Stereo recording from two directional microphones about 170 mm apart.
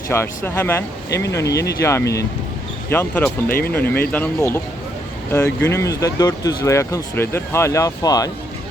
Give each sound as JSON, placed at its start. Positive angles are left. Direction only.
{"t": 0.1, "sound": "speech", "side_deg": 15}